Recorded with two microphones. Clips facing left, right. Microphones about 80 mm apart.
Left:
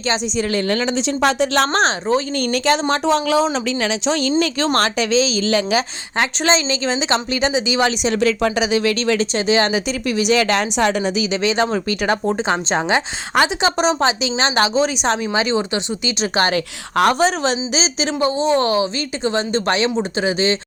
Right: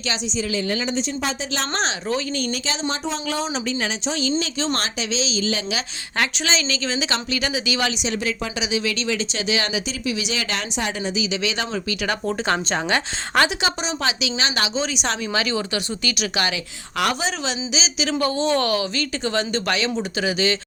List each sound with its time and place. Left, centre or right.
0.3 s speech: left
3.8 s speech: left
4.2 s speech: left
6.4 s a woman's voice: left
8.1 s speech: left
8.5 s speech: left
9.5 s speech: left
10.8 s speech: left
11.4 s a woman's voice: left
12.2 s a woman's voice: left
14.0 s a woman's voice: left
15.3 s a woman's voice: left
16.3 s a woman's voice: left
18.2 s a woman's voice: left